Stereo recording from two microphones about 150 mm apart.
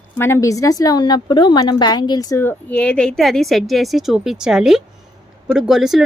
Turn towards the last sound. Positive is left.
turn(degrees=0)  # may be behind; listen again after turning